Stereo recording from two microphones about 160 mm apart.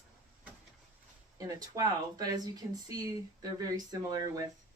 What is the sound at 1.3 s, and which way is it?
Speech, 20° right (ahead or behind).